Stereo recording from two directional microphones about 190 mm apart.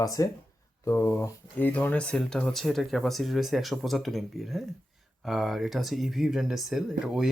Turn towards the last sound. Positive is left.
turn(degrees=0)  # may be behind; listen again after turning